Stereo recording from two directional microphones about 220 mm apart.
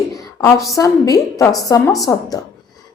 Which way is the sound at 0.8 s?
15° left (ahead or behind).